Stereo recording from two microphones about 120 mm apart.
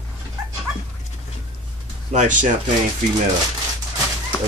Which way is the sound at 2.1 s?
90° right.